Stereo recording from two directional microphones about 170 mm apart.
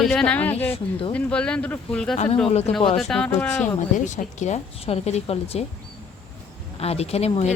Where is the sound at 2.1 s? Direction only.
40° left (ahead or behind).